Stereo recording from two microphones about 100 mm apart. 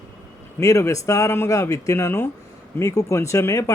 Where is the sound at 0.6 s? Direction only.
35° left (ahead or behind).